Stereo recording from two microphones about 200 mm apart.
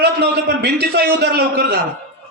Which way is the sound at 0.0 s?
55° right (ahead or behind).